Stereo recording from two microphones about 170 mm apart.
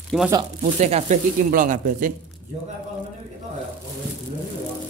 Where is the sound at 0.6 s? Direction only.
40° right (ahead or behind).